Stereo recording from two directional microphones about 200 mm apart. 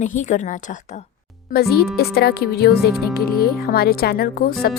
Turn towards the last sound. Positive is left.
turn(degrees=50)  # may be behind; listen again after turning